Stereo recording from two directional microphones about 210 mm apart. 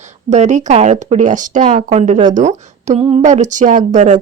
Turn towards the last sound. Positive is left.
turn(degrees=-35)  # may be behind; listen again after turning